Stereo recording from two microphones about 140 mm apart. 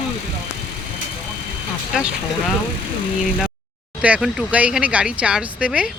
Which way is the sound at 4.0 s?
10° right (ahead or behind).